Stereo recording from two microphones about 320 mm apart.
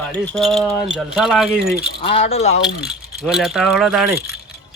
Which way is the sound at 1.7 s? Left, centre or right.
Centre.